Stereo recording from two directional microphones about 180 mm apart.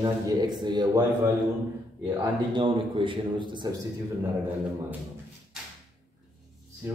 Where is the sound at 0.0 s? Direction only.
25° right (ahead or behind).